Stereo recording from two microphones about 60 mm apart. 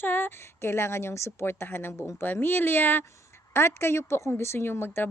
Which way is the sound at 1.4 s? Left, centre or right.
Left.